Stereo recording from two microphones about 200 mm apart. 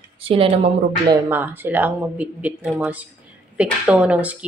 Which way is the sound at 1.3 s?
10° right (ahead or behind).